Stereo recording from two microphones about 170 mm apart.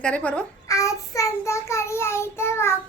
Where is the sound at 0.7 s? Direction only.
20° left (ahead or behind).